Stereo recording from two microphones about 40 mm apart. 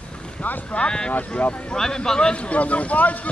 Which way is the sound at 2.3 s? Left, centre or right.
Left.